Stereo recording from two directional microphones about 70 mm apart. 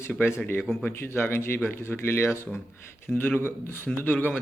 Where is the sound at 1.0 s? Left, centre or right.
Left.